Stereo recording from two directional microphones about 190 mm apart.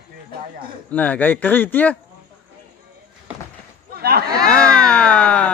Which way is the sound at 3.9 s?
55° right (ahead or behind).